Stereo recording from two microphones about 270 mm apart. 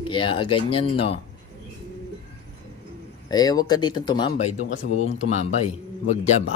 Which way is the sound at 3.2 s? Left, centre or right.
Centre.